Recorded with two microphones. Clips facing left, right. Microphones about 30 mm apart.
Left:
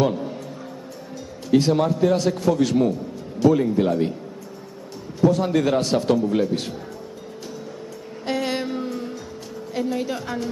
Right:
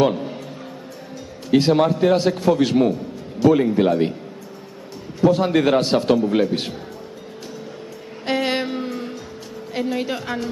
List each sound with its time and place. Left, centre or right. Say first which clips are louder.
0.0 s music: right 3 dB; right
1.5 s a man's voice: right 2 dB; right
5.2 s a man's voice: right 2 dB; right
8.3 s music: right 3 dB; right
9.9 s a man's voice: right 2 dB; right